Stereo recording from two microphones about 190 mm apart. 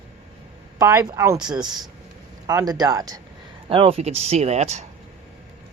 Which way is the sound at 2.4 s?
20° right (ahead or behind).